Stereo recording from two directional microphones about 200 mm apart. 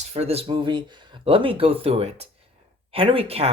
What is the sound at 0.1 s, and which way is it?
Speech, 30° right (ahead or behind).